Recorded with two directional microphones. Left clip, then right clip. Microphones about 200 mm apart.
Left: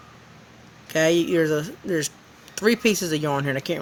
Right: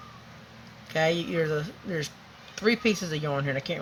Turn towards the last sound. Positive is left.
turn(degrees=60)  # may be behind; listen again after turning